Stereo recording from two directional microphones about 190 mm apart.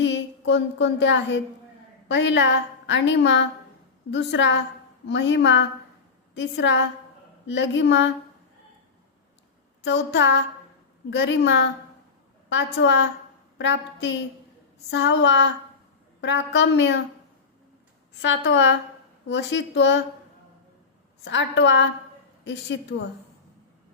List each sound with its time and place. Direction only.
0.0 s a sound: 70° left (ahead or behind)
2.0 s a woman's voice: 70° left (ahead or behind)
9.8 s a woman's voice: 70° left (ahead or behind)
18.2 s a woman's voice: 70° left (ahead or behind)
21.2 s a woman's voice: 70° left (ahead or behind)